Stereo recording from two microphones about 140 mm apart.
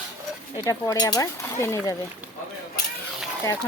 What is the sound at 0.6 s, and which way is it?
A child's voice, 25° left (ahead or behind).